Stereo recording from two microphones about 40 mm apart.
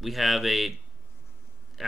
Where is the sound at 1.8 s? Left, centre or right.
Centre.